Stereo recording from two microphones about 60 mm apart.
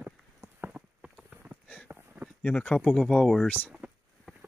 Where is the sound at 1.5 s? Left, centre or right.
Right.